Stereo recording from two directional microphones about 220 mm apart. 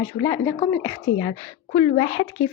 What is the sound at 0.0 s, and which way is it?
Speech, 15° left (ahead or behind).